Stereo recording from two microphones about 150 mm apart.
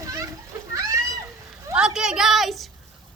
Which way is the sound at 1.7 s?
5° right (ahead or behind).